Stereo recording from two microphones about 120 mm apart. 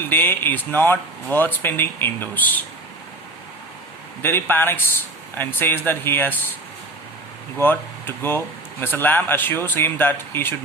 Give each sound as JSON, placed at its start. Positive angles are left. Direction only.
{"t": 0.0, "sound": "speech", "side_deg": 20}
{"t": 4.2, "sound": "speech", "side_deg": 15}
{"t": 7.6, "sound": "speech", "side_deg": 15}